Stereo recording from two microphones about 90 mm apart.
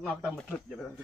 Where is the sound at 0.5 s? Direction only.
5° left (ahead or behind).